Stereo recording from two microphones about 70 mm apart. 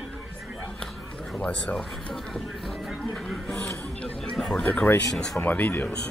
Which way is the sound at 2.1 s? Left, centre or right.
Centre.